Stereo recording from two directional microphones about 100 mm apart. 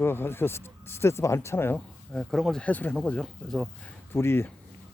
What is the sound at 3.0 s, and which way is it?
Speech, 5° left (ahead or behind).